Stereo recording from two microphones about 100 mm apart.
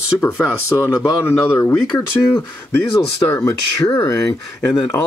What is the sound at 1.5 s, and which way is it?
Speech, 30° left (ahead or behind).